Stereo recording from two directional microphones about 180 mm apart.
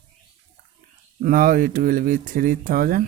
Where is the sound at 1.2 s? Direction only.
50° right (ahead or behind).